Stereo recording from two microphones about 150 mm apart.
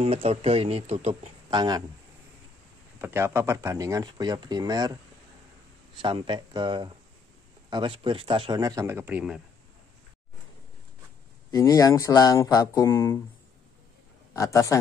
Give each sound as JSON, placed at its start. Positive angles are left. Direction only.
{"t": 0.0, "sound": "speech", "side_deg": -40}
{"t": 1.5, "sound": "speech", "side_deg": -30}
{"t": 3.0, "sound": "speech", "side_deg": -15}
{"t": 5.9, "sound": "speech", "side_deg": -35}
{"t": 8.5, "sound": "speech", "side_deg": -25}
{"t": 11.5, "sound": "speech", "side_deg": 20}
{"t": 14.3, "sound": "speech", "side_deg": 20}